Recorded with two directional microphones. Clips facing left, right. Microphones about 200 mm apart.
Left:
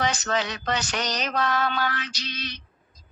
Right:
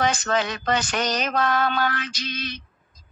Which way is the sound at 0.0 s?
50° right (ahead or behind).